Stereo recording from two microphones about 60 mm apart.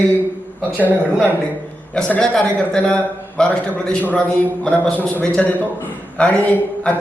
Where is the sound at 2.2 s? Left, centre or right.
Centre.